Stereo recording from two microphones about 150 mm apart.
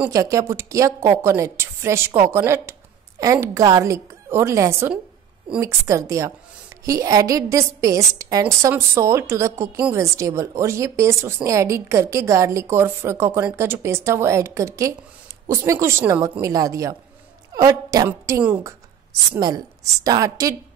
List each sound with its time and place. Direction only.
0.1 s a woman's voice: 20° right (ahead or behind)
19.4 s a woman's voice: 25° right (ahead or behind)